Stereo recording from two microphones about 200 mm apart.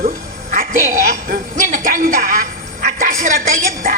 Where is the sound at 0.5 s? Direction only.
40° right (ahead or behind).